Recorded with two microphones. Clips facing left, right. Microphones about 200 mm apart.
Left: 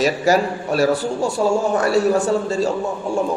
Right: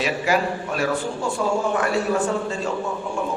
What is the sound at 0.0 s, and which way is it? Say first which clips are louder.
A man's voice: left 5 dB; 40° left (ahead or behind).